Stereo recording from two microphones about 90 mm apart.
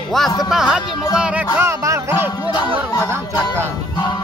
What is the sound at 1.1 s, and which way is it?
Music, 10° right (ahead or behind).